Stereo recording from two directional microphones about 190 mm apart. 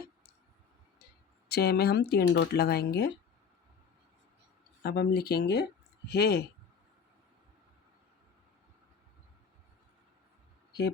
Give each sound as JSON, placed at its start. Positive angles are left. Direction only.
{"t": 1.5, "sound": "speech", "side_deg": 55}
{"t": 4.8, "sound": "speech", "side_deg": 55}